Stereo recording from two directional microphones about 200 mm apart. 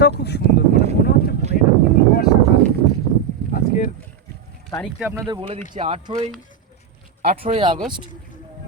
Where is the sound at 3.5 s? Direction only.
40° left (ahead or behind).